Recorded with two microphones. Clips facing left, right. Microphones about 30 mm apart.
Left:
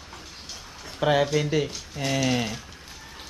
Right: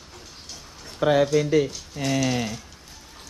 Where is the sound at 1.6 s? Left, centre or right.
Left.